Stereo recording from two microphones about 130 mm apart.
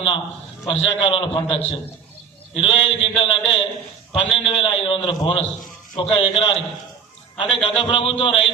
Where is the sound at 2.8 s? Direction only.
45° left (ahead or behind).